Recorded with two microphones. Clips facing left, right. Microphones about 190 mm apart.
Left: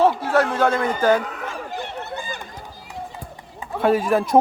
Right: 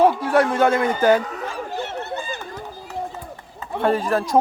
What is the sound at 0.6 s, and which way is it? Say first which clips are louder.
Speech: right 2 dB; 10° right (ahead or behind).